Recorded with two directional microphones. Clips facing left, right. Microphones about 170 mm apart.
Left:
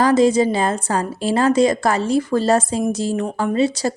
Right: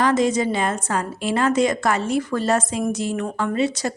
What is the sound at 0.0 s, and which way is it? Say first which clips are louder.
Speech: left 5 dB; 30° left (ahead or behind).